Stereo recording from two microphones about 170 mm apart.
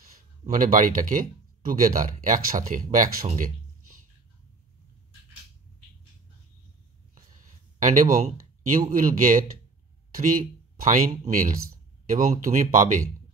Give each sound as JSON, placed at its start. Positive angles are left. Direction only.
{"t": 0.5, "sound": "speech", "side_deg": -50}
{"t": 7.2, "sound": "a sound", "side_deg": -50}
{"t": 8.8, "sound": "speech", "side_deg": -50}